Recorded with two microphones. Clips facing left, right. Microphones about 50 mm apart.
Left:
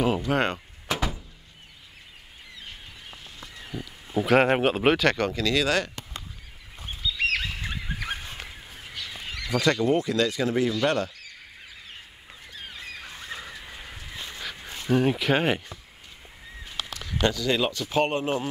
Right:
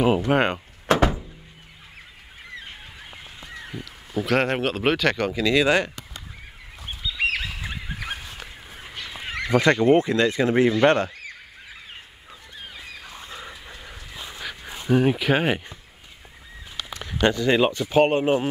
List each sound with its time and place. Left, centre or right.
0.3 s speech: centre
0.8 s door: right
4.1 s speech: centre
5.4 s speech: centre
7.0 s goose: centre
8.8 s speech: right
13.1 s a sound: right
14.1 s a sound: centre
14.7 s speech: centre
17.0 s speech: right